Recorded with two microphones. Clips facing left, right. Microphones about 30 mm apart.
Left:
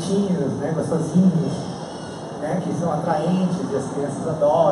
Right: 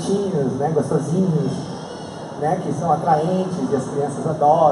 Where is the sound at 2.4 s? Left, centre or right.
Centre.